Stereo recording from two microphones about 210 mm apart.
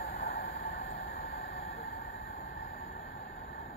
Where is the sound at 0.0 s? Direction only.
45° left (ahead or behind).